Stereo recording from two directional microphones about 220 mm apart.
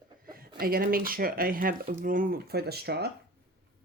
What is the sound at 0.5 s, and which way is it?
Speech, 40° right (ahead or behind).